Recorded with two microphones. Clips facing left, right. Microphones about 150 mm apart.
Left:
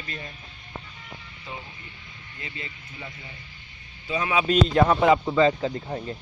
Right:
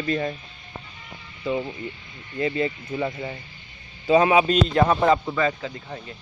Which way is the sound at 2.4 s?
60° right (ahead or behind).